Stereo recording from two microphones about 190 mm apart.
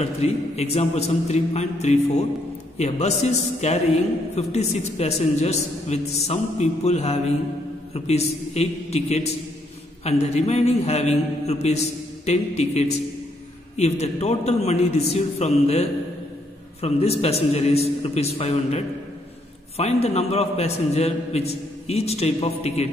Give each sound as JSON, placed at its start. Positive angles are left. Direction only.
{"t": 0.0, "sound": "a man's voice", "side_deg": 35}